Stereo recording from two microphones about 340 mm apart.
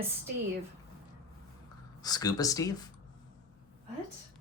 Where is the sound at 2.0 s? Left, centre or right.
Centre.